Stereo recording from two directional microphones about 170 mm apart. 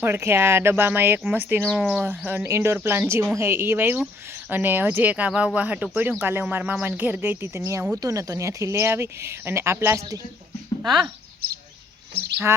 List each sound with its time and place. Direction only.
0.0 s speech: 15° right (ahead or behind)
12.5 s bird: 15° right (ahead or behind)